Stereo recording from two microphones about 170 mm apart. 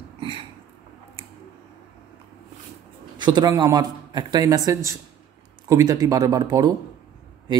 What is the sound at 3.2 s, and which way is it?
Speech, 25° right (ahead or behind).